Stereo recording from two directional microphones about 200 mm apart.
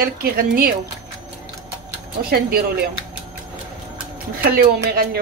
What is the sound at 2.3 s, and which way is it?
Speech, 50° right (ahead or behind).